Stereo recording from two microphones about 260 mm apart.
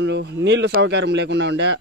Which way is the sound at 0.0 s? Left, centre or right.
Right.